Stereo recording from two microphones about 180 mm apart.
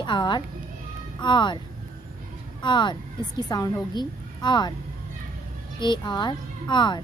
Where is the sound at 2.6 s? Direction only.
25° left (ahead or behind).